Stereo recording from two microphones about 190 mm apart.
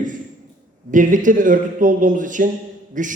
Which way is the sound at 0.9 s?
45° right (ahead or behind).